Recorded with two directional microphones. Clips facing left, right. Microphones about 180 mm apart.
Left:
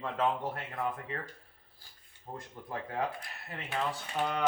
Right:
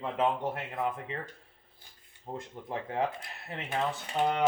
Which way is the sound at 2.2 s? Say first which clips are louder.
Right 4 dB; 20° right (ahead or behind).